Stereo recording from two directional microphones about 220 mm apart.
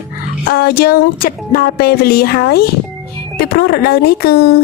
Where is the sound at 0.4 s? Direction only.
45° left (ahead or behind).